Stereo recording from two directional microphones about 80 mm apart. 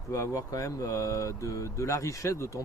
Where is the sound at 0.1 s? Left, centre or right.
Left.